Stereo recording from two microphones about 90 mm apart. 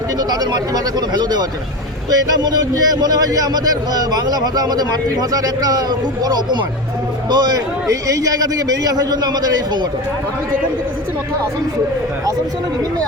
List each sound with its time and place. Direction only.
0.2 s a man's voice: 50° right (ahead or behind)